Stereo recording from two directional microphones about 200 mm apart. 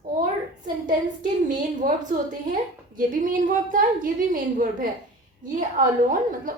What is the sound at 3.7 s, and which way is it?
A woman's voice, 40° right (ahead or behind).